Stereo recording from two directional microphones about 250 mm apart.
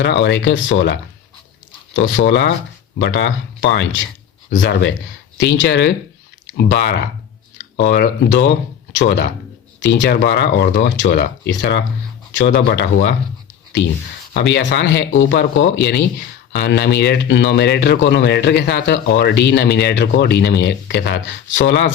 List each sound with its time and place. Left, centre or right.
0.0 s speech: left
2.0 s speech: left
14.3 s speech: left